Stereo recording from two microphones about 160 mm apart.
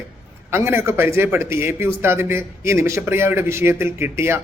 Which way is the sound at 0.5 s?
15° right (ahead or behind).